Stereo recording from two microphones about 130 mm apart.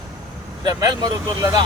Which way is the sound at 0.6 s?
30° right (ahead or behind).